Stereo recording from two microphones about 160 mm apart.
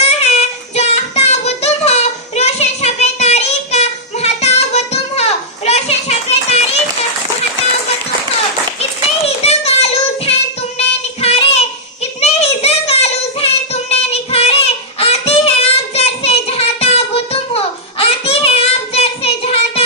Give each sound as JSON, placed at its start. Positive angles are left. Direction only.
{"t": 0.3, "sound": "child singing", "side_deg": 40}
{"t": 9.2, "sound": "child singing", "side_deg": 40}
{"t": 10.8, "sound": "music", "side_deg": 40}
{"t": 12.2, "sound": "child singing", "side_deg": 40}